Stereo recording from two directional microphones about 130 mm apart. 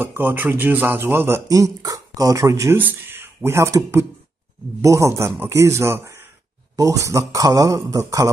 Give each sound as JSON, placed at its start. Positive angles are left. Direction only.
{"t": 0.0, "sound": "a man's voice", "side_deg": -15}